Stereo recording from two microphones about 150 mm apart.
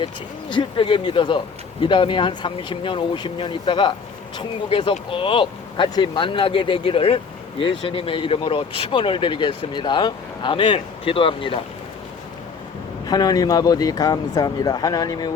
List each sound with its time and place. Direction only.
0.5 s speech: 35° left (ahead or behind)
13.1 s speech: 25° left (ahead or behind)